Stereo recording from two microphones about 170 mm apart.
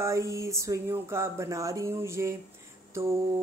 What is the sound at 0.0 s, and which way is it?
Speech, 20° right (ahead or behind).